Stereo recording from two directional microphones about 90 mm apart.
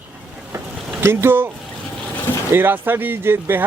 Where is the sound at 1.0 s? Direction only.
25° right (ahead or behind).